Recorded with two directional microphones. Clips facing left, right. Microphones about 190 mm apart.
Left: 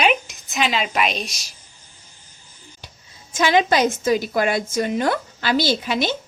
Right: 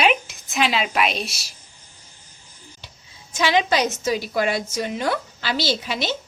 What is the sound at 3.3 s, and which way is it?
A woman's voice, 50° left (ahead or behind).